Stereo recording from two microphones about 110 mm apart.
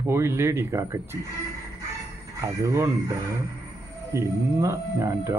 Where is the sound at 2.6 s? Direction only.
25° right (ahead or behind).